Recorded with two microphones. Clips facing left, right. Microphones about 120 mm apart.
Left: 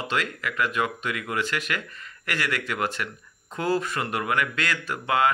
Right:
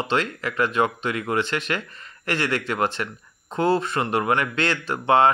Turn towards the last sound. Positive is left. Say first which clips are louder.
# right 5 dB
turn(degrees=-30)  # may be behind; listen again after turning